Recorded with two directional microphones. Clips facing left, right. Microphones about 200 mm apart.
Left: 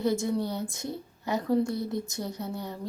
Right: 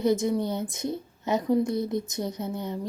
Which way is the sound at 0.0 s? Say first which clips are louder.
Right 3 dB; 20° right (ahead or behind).